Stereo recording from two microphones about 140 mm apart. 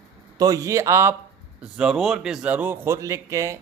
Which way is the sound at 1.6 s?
5° right (ahead or behind).